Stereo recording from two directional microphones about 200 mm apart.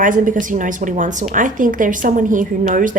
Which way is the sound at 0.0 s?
40° right (ahead or behind).